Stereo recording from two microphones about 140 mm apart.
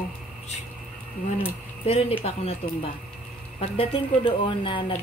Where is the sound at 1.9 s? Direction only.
45° left (ahead or behind).